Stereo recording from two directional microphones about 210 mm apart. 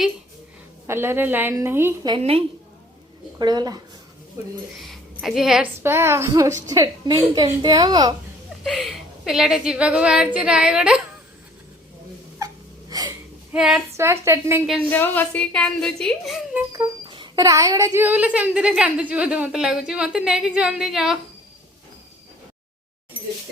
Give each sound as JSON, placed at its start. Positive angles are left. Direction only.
{"t": 0.9, "sound": "a woman's voice", "side_deg": -10}
{"t": 2.1, "sound": "speech", "side_deg": -25}
{"t": 4.8, "sound": "a woman's voice", "side_deg": 0}
{"t": 8.6, "sound": "speech", "side_deg": 0}
{"t": 12.9, "sound": "a sound", "side_deg": -20}
{"t": 13.5, "sound": "a woman's voice", "side_deg": -5}
{"t": 14.7, "sound": "speech", "side_deg": 10}
{"t": 16.7, "sound": "speech", "side_deg": -20}